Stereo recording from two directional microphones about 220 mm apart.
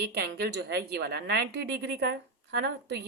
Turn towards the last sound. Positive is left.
turn(degrees=-50)  # may be behind; listen again after turning